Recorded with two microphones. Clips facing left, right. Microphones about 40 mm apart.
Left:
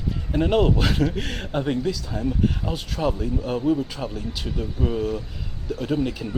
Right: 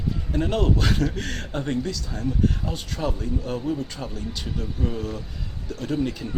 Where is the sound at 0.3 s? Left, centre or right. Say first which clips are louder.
Left 4 dB; centre.